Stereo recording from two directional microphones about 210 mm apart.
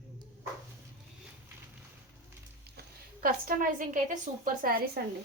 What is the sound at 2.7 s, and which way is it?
A woman's voice, 45° right (ahead or behind).